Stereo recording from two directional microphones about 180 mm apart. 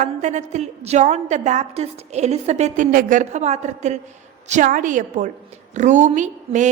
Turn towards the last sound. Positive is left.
turn(degrees=-45)  # may be behind; listen again after turning